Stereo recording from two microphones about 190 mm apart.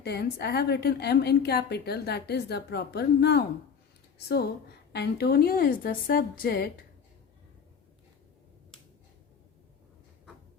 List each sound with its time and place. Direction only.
0.0 s a woman's voice: 60° left (ahead or behind)
4.9 s a woman's voice: 60° left (ahead or behind)